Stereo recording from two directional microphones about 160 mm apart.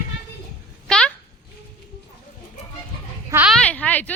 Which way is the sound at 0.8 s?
5° left (ahead or behind).